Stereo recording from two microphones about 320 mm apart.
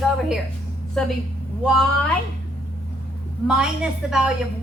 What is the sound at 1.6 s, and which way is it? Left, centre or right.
Speech, centre.